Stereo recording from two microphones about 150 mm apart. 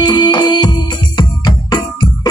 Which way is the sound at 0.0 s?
30° left (ahead or behind).